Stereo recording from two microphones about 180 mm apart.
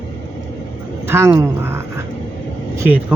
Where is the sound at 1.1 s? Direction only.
15° right (ahead or behind).